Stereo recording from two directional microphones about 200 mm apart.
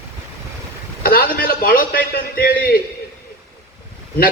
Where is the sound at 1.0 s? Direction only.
45° left (ahead or behind).